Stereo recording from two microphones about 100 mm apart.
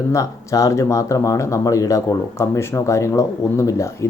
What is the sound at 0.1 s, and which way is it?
A man's voice, 35° left (ahead or behind).